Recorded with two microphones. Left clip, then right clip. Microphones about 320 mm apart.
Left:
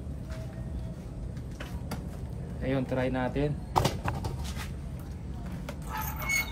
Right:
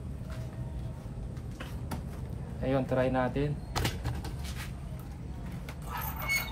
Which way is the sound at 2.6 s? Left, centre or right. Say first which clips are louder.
Right 1 dB; centre.